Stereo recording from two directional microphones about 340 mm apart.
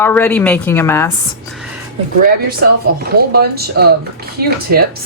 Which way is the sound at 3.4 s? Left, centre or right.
Right.